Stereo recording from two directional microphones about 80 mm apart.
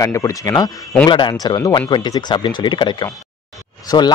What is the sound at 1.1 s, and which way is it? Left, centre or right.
Speech, left.